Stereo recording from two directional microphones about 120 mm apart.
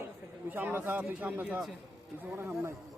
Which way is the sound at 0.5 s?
15° right (ahead or behind).